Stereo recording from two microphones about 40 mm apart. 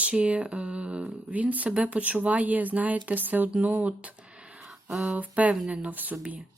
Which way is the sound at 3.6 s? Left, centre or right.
Right.